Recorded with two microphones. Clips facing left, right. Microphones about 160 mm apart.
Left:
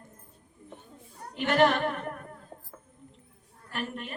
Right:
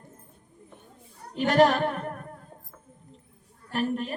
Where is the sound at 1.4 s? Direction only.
35° right (ahead or behind).